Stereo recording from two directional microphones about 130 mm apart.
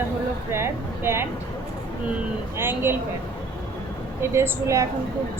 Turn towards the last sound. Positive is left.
turn(degrees=-20)  # may be behind; listen again after turning